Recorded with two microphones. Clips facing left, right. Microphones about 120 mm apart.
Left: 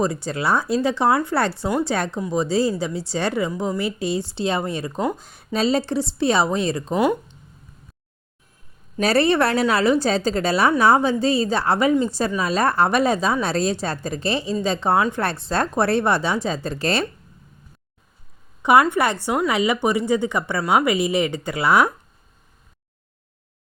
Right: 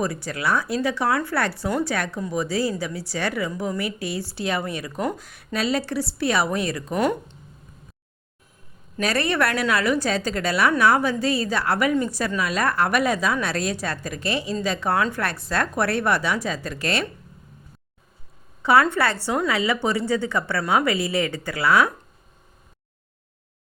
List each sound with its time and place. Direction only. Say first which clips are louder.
0.0 s a woman's voice: left 3 dB; 25° left (ahead or behind)
6.9 s speech: left 2 dB; 15° left (ahead or behind)
9.0 s a woman's voice: left 5 dB; 30° left (ahead or behind)
18.6 s speech: left 2 dB; 15° left (ahead or behind)